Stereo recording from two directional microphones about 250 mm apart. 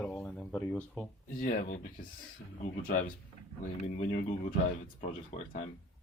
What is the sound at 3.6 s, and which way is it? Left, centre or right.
Speech, left.